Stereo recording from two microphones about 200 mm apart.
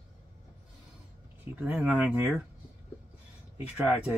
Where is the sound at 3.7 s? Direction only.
5° right (ahead or behind).